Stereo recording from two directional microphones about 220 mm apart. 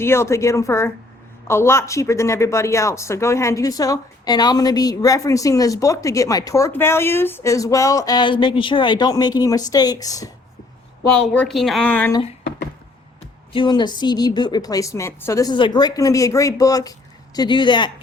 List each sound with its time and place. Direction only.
0.0 s speech: 10° left (ahead or behind)
11.1 s speech: 5° left (ahead or behind)
13.5 s speech: 20° left (ahead or behind)